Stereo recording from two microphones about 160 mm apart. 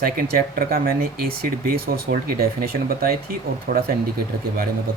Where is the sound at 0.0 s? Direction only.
70° right (ahead or behind).